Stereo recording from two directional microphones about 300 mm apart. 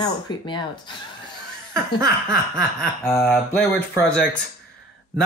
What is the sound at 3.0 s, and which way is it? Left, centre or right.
Speech, centre.